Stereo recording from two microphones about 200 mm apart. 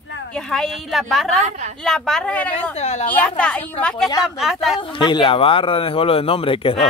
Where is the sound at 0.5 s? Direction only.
Centre (ahead or behind).